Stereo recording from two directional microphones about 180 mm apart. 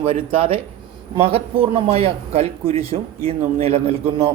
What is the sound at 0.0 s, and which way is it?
Speech, 30° right (ahead or behind).